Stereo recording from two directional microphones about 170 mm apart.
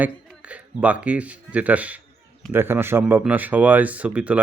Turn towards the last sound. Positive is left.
turn(degrees=-10)  # may be behind; listen again after turning